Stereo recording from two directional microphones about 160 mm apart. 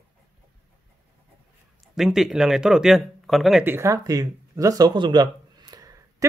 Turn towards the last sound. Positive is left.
turn(degrees=-25)  # may be behind; listen again after turning